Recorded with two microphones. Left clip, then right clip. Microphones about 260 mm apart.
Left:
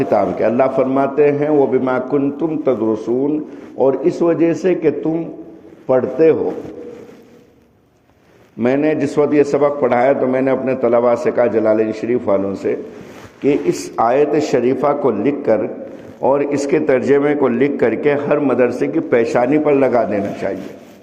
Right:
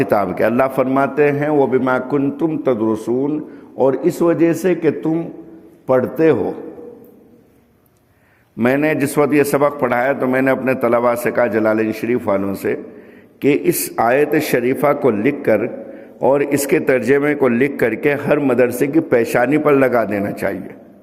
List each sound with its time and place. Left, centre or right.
0.0 s a man's voice: right
8.5 s a man's voice: right